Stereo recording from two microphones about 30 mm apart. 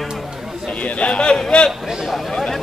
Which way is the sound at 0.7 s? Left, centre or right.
Left.